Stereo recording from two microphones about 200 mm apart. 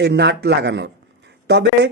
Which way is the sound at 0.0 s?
55° right (ahead or behind).